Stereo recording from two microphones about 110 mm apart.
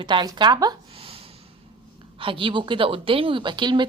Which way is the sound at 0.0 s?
45° right (ahead or behind).